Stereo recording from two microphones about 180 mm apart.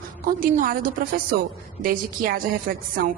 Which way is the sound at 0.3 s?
50° right (ahead or behind).